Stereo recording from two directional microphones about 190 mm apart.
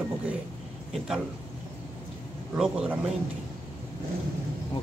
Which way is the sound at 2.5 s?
5° right (ahead or behind).